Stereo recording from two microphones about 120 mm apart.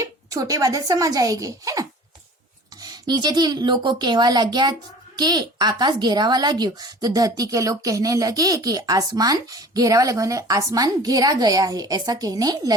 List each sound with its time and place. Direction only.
0.0 s a woman's voice: 30° right (ahead or behind)